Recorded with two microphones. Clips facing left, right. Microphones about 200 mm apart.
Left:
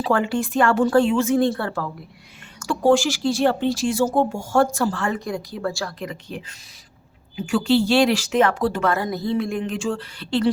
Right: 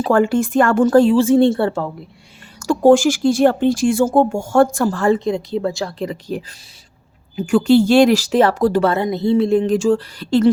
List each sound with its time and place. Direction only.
0.0 s speech: 45° right (ahead or behind); by 1.9 s 25° right (ahead or behind)
2.6 s speech: 40° right (ahead or behind)
5.1 s a woman's voice: 25° right (ahead or behind)
7.3 s speech: 45° right (ahead or behind)